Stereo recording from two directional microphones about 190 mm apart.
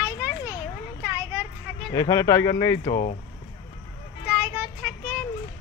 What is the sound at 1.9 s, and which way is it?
Speech, 15° left (ahead or behind).